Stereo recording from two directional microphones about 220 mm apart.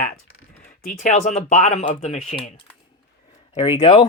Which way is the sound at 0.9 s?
35° left (ahead or behind).